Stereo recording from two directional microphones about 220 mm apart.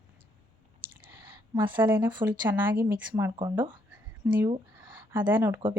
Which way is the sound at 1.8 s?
10° right (ahead or behind).